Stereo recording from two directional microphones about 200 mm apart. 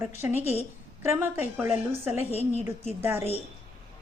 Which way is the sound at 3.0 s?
10° right (ahead or behind).